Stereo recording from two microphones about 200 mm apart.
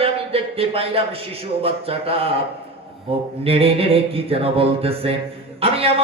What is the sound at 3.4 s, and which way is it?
Speech, 30° right (ahead or behind).